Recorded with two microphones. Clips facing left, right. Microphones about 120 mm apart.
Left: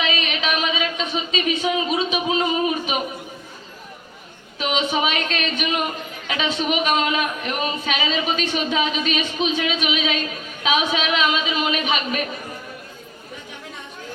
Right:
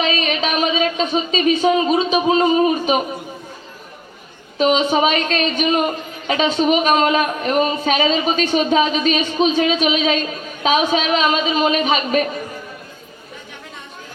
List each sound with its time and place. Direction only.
0.0 s speech: 40° right (ahead or behind)
4.5 s speech: 40° right (ahead or behind)